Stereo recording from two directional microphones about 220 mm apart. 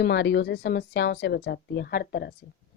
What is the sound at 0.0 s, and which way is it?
Speech, 50° left (ahead or behind).